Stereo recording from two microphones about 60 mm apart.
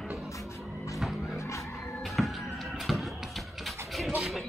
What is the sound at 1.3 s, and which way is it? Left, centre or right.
Music, left.